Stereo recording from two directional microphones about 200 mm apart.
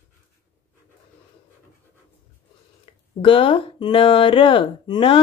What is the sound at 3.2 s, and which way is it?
Speech, 25° left (ahead or behind).